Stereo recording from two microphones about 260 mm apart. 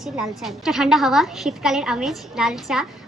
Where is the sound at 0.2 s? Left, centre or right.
Centre.